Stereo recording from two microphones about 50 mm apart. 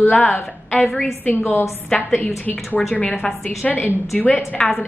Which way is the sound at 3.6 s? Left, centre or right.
Left.